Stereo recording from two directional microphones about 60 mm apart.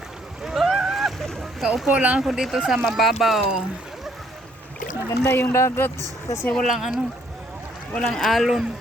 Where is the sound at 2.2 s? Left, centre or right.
Centre.